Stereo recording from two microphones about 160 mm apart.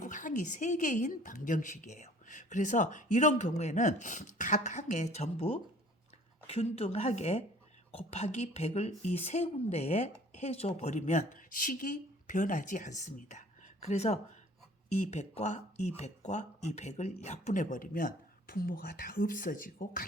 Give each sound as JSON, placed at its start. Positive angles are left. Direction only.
{"t": 0.0, "sound": "speech", "side_deg": 55}